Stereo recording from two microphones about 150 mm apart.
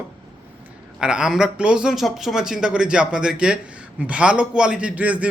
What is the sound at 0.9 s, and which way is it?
A man's voice, 5° right (ahead or behind).